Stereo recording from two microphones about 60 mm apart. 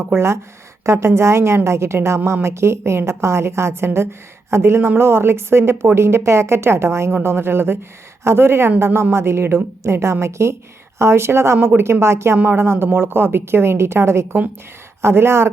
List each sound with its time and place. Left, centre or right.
0.1 s a woman's voice: right